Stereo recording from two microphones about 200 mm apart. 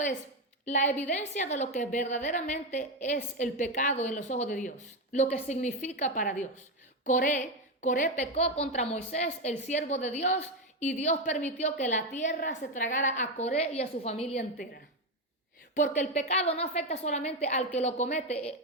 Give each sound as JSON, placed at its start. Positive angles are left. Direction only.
{"t": 0.7, "sound": "a woman's voice", "side_deg": 35}
{"t": 15.7, "sound": "a woman's voice", "side_deg": 35}